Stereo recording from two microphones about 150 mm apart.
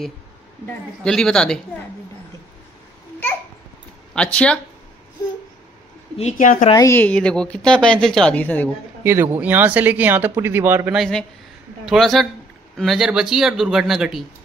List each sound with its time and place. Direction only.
0.7 s speech: 5° left (ahead or behind)
4.1 s speech: 5° left (ahead or behind)
6.3 s speech: 60° left (ahead or behind)
6.7 s a woman's voice: 20° left (ahead or behind)
9.0 s speech: 15° right (ahead or behind)
11.0 s speech: 5° left (ahead or behind)